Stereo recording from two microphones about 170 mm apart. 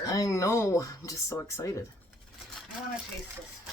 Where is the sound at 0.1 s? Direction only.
20° left (ahead or behind).